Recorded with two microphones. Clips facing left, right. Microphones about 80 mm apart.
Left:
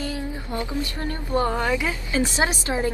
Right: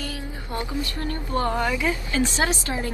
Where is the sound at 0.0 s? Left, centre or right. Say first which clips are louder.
Left 4 dB; left.